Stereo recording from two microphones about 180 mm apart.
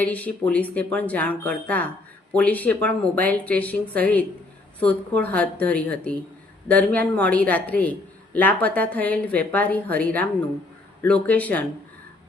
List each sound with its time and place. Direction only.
0.0 s speech: 10° left (ahead or behind)